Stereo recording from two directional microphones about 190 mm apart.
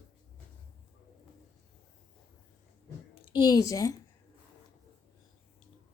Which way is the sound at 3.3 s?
20° left (ahead or behind).